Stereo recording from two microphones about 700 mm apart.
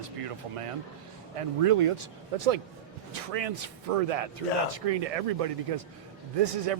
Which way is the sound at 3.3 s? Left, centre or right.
Right.